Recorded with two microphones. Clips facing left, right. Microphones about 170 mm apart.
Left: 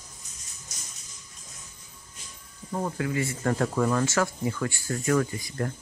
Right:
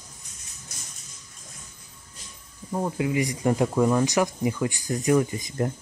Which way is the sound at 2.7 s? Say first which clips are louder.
Right 3 dB; 15° right (ahead or behind).